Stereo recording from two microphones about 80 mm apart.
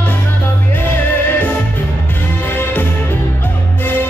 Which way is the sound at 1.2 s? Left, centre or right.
Left.